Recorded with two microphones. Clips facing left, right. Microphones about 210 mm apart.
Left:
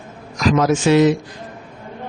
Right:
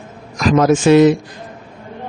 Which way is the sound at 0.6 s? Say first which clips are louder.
Right 5 dB; 50° right (ahead or behind).